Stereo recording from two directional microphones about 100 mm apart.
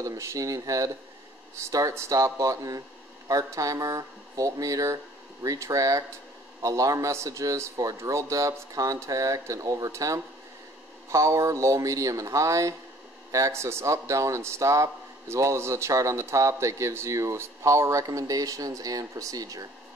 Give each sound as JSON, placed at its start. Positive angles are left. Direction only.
{"t": 0.0, "sound": "a man's voice", "side_deg": -30}